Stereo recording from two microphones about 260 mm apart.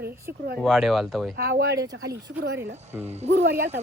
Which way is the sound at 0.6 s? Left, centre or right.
Centre.